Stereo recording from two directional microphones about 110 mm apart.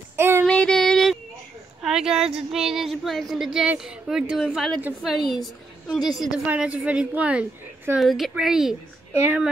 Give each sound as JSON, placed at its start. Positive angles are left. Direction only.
{"t": 0.1, "sound": "child singing", "side_deg": -20}
{"t": 0.5, "sound": "female singing", "side_deg": 5}
{"t": 1.8, "sound": "a sound", "side_deg": -5}
{"t": 2.5, "sound": "a woman's voice", "side_deg": -5}
{"t": 8.0, "sound": "a woman's voice", "side_deg": 0}